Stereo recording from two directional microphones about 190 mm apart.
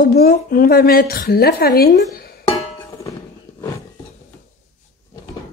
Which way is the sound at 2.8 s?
15° left (ahead or behind).